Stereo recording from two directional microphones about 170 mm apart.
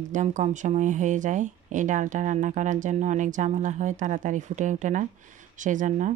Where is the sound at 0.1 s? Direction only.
45° right (ahead or behind).